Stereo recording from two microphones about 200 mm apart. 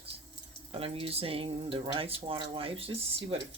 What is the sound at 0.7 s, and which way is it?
Speech, 25° right (ahead or behind).